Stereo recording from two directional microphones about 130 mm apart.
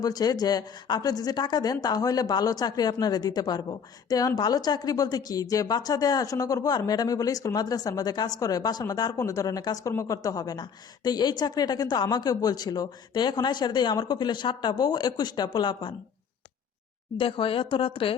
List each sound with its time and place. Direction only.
0.0 s a woman's voice: 30° left (ahead or behind)
17.2 s speech: 45° left (ahead or behind)